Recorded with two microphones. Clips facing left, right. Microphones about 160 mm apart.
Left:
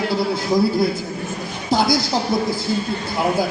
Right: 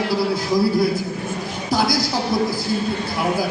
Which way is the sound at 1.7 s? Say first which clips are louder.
Left 2 dB; 25° left (ahead or behind).